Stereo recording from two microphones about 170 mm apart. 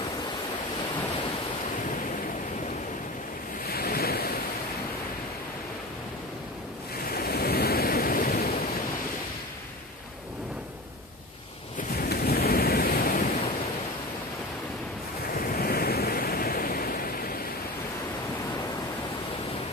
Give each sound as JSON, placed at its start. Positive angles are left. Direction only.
{"t": 3.6, "sound": "waves", "side_deg": 65}
{"t": 7.1, "sound": "waves", "side_deg": 65}
{"t": 11.9, "sound": "waves", "side_deg": 65}
{"t": 15.3, "sound": "waves", "side_deg": 60}